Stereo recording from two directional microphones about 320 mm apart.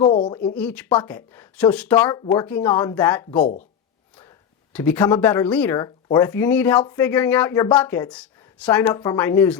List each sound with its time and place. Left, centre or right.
0.0 s speech: centre
0.5 s speech: centre
4.7 s speech: centre